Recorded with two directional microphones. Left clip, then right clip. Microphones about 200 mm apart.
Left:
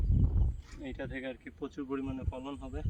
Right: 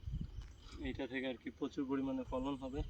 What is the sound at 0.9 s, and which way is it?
Speech, centre (ahead or behind).